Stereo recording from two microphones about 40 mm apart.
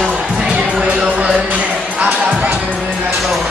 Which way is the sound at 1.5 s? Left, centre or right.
Right.